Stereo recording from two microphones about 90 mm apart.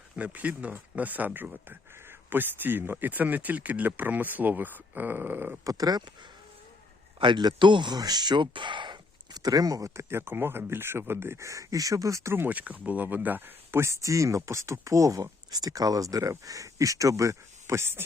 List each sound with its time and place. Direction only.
0.2 s speech: 15° right (ahead or behind)
5.6 s speech: 45° right (ahead or behind)
7.2 s speech: 55° right (ahead or behind); by 18.0 s 30° right (ahead or behind)